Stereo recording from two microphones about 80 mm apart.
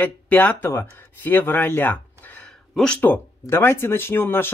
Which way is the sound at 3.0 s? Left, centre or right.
Left.